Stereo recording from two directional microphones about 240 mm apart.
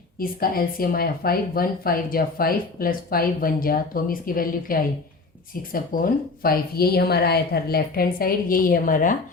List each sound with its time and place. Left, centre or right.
0.2 s speech: left